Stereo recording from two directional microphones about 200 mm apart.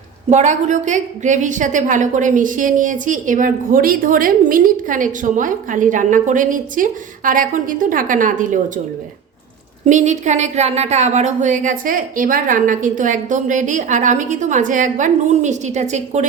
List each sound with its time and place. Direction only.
0.3 s a woman's voice: 35° right (ahead or behind)
9.8 s a woman's voice: 35° right (ahead or behind)